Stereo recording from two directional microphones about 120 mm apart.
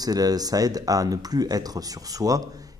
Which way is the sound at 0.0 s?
30° right (ahead or behind).